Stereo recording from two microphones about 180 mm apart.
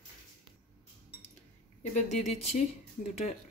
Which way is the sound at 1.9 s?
40° left (ahead or behind).